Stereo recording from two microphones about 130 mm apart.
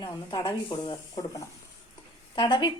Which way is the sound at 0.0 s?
35° left (ahead or behind).